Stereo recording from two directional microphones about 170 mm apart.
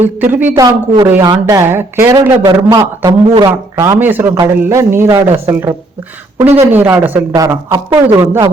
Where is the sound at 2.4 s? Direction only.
30° right (ahead or behind).